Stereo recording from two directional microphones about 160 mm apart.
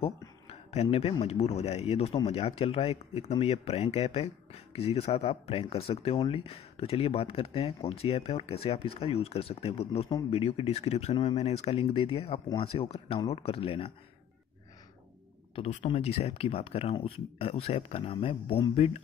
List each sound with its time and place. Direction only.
0.5 s a sound: 40° left (ahead or behind)
1.2 s speech: 40° left (ahead or behind)
15.5 s speech: 45° left (ahead or behind)